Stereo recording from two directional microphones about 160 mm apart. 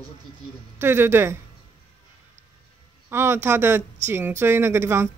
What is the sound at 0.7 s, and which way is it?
Speech, 15° right (ahead or behind).